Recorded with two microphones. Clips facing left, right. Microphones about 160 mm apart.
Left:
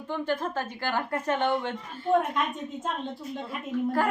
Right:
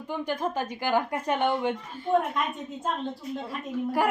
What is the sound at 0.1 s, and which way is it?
A woman's voice, 15° right (ahead or behind).